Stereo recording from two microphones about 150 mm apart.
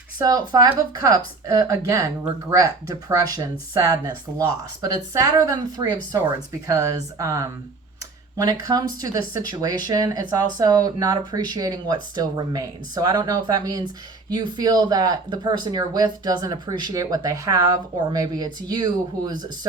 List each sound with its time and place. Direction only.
0.2 s speech: 25° right (ahead or behind)